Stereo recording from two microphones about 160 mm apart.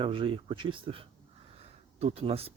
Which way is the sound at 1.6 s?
40° right (ahead or behind).